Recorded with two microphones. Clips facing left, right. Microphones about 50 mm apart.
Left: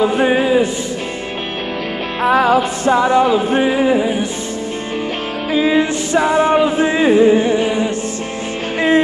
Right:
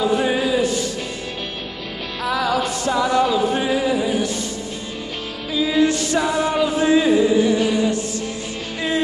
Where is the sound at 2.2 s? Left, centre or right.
Left.